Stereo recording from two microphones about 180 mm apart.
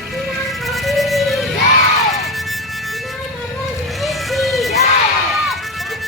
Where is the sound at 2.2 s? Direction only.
Centre (ahead or behind).